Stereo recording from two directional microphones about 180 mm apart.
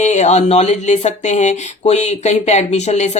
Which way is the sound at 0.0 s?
40° left (ahead or behind).